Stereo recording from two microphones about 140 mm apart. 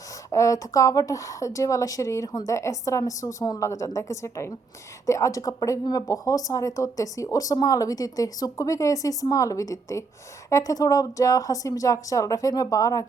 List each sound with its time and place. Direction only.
0.3 s speech: 25° left (ahead or behind)